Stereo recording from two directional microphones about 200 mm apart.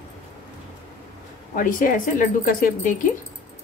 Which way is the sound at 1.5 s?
45° left (ahead or behind).